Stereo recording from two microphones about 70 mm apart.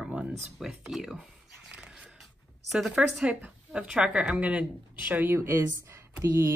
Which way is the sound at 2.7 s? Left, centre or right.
Centre.